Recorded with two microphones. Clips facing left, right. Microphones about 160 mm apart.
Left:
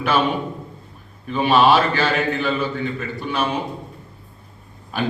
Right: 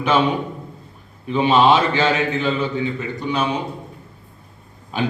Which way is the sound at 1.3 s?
20° right (ahead or behind).